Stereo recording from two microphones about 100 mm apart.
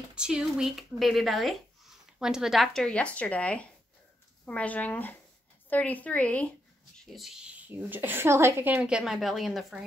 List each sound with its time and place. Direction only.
0.1 s speech: 5° right (ahead or behind); by 6.5 s 15° left (ahead or behind)
7.0 s a woman's voice: centre (ahead or behind); by 8.8 s 20° right (ahead or behind)
8.8 s speech: 5° right (ahead or behind)